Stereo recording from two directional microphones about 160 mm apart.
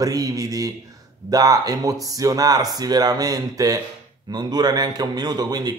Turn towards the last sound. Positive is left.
turn(degrees=-25)  # may be behind; listen again after turning